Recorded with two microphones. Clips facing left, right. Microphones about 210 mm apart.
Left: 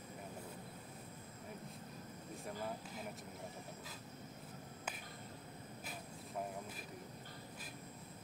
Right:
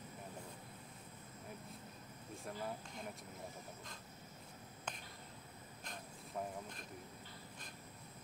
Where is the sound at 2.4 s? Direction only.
5° left (ahead or behind).